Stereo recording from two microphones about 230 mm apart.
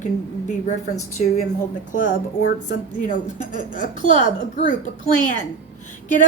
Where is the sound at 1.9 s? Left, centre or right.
Left.